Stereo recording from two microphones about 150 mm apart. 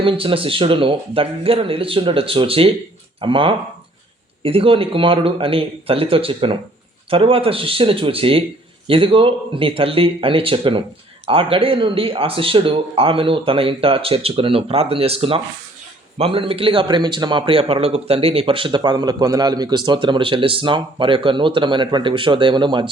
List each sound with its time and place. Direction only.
0.0 s speech: 35° right (ahead or behind)